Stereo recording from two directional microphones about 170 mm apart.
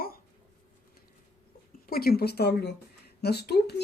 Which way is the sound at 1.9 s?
60° left (ahead or behind).